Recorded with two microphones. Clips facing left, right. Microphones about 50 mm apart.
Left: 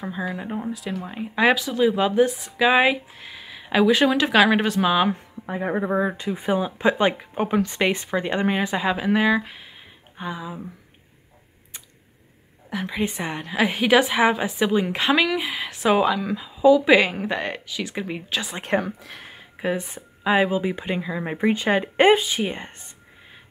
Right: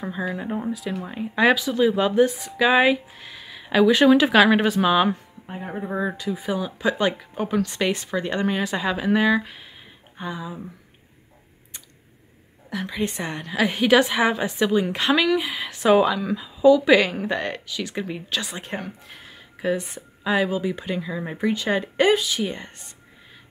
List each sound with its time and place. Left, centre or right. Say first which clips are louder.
0.0 s a woman's voice: right 1 dB; centre
5.9 s speech: left 1 dB; left
6.1 s speech: left 3 dB; left; by 10.7 s centre
12.6 s a woman's voice: left 1 dB; centre
19.3 s a sound: right 1 dB; centre
20.2 s speech: left 2 dB; centre
21.2 s speech: left 4 dB; left